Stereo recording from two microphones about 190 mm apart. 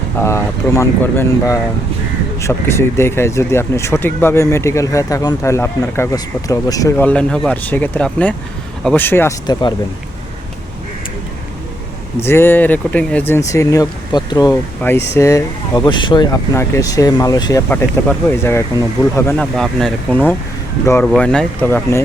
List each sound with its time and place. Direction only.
0.2 s speech: 15° left (ahead or behind)
12.2 s speech: 10° left (ahead or behind)
14.8 s speech: 10° left (ahead or behind)